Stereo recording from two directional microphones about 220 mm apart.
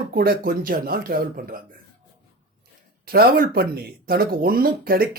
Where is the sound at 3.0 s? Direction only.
40° right (ahead or behind).